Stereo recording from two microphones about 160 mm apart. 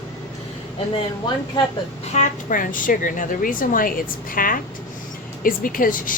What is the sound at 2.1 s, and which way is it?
Speech, 55° left (ahead or behind).